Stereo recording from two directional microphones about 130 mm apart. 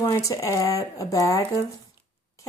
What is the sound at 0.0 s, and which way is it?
Speech, 25° left (ahead or behind).